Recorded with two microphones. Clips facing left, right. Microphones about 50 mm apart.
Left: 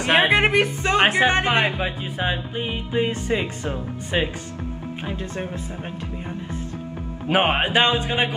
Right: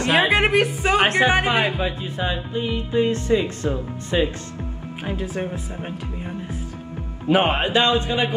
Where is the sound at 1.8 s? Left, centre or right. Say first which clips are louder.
Right 1 dB; centre.